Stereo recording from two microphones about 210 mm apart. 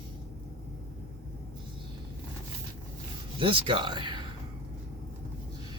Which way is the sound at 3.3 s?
25° right (ahead or behind).